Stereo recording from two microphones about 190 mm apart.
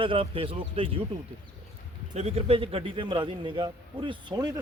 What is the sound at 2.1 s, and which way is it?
Speech, 35° right (ahead or behind).